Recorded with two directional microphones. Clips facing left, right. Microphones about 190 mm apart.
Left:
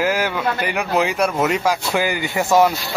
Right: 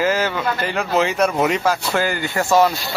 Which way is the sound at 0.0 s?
10° left (ahead or behind).